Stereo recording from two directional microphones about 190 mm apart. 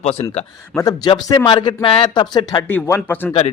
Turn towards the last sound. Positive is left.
turn(degrees=10)  # may be behind; listen again after turning